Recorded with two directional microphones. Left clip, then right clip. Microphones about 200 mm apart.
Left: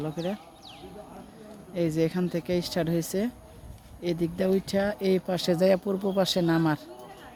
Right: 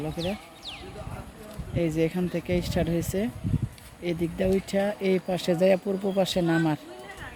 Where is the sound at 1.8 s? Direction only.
5° left (ahead or behind).